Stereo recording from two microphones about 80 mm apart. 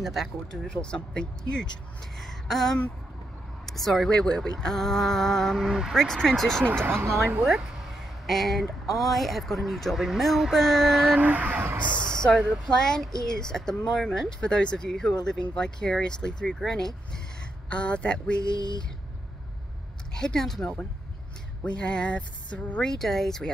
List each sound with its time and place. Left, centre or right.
0.0 s speech: centre
0.7 s speech: centre
2.1 s a sound: centre
3.6 s speech: centre
5.9 s speech: centre
6.6 s speech: right
8.3 s speech: centre
11.1 s speech: centre
12.1 s a sound: centre
12.6 s speech: centre
18.4 s a sound: left
20.2 s speech: centre
22.8 s speech: centre